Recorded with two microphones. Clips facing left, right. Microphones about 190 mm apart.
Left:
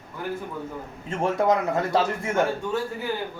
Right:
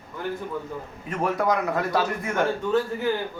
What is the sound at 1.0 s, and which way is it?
A man's voice, 25° left (ahead or behind).